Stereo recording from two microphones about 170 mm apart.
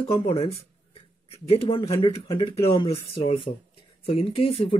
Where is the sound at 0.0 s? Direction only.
35° left (ahead or behind).